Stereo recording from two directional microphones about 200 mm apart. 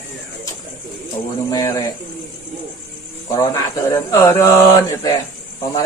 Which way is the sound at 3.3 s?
15° left (ahead or behind).